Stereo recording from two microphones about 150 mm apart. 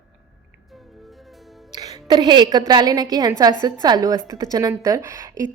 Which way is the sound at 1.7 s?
25° right (ahead or behind).